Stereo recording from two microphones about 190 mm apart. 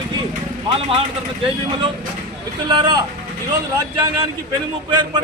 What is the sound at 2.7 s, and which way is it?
Speech, 20° right (ahead or behind).